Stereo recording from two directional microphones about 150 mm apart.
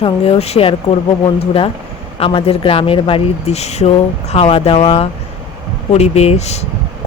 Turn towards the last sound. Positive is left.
turn(degrees=45)  # may be behind; listen again after turning